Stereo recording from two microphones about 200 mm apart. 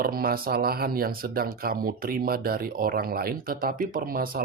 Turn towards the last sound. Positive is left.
turn(degrees=-45)  # may be behind; listen again after turning